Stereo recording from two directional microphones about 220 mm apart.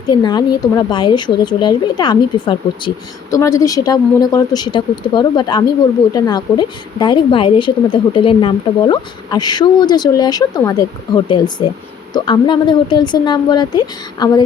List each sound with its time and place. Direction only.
0.1 s speech: 20° left (ahead or behind)